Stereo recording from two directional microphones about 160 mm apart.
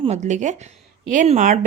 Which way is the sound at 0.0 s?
45° right (ahead or behind).